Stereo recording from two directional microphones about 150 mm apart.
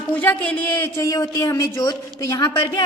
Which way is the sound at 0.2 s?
10° left (ahead or behind).